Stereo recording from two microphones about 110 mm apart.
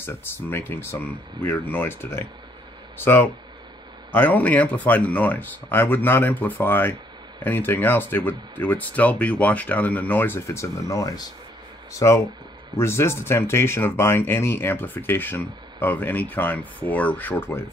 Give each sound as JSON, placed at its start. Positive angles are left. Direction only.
{"t": 0.0, "sound": "speech", "side_deg": 20}